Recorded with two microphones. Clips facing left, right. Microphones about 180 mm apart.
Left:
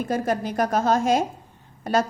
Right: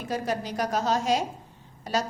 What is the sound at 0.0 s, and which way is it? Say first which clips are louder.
A woman's voice: left 5 dB; 50° left (ahead or behind).